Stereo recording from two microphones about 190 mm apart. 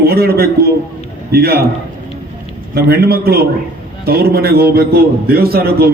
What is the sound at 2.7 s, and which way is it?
A man's voice, 55° right (ahead or behind).